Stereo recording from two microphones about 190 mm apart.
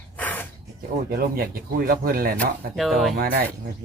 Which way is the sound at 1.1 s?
55° right (ahead or behind).